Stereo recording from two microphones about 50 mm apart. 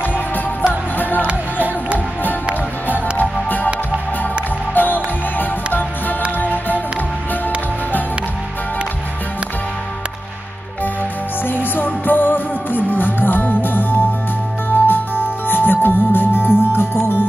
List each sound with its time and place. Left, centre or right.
3.4 s music: left
4.7 s music: left
11.4 s music: left